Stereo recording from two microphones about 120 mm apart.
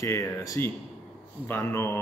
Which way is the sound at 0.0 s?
25° left (ahead or behind).